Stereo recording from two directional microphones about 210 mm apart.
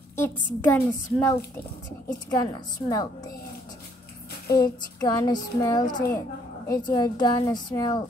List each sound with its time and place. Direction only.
0.2 s a woman's voice: 10° left (ahead or behind)
2.3 s a woman's voice: 20° left (ahead or behind)
4.5 s a woman's voice: 15° left (ahead or behind)